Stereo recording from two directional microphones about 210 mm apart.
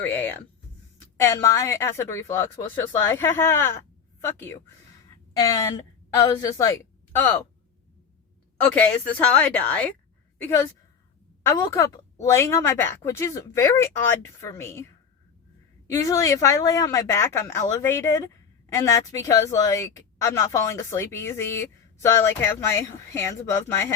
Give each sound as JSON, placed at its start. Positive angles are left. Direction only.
{"t": 0.0, "sound": "a woman's voice", "side_deg": 10}
{"t": 8.7, "sound": "a woman's voice", "side_deg": 10}
{"t": 12.2, "sound": "speech", "side_deg": 15}
{"t": 15.9, "sound": "speech", "side_deg": 15}